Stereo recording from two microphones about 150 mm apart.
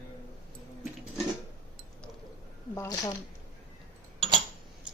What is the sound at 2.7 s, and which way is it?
Speech, 20° left (ahead or behind).